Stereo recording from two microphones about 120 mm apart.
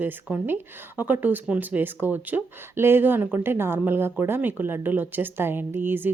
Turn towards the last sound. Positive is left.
turn(degrees=-15)  # may be behind; listen again after turning